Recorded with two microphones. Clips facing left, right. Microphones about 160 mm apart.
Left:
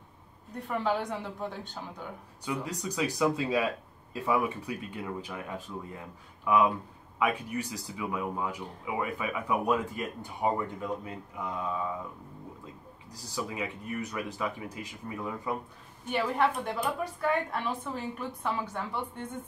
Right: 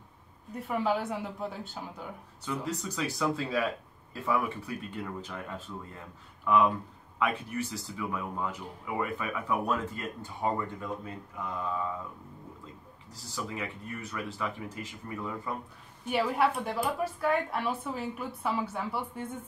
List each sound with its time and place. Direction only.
0.6 s speech: 5° right (ahead or behind)
2.4 s speech: 10° left (ahead or behind)
13.1 s speech: 15° left (ahead or behind)
16.1 s a woman's voice: 5° right (ahead or behind)